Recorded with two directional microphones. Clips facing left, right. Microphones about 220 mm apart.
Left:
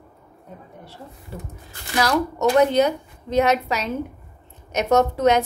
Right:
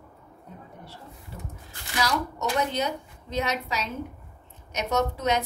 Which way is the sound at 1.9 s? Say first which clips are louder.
Left 7 dB; 55° left (ahead or behind).